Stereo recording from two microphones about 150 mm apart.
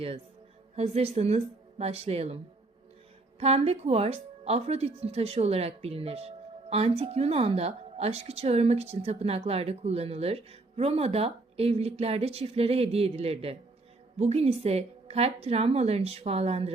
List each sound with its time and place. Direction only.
0.8 s speech: 45° right (ahead or behind)
3.4 s speech: 45° right (ahead or behind)